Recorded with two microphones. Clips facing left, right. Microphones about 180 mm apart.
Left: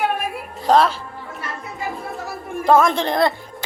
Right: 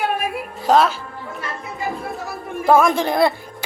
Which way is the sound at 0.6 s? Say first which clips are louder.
Even; centre (ahead or behind).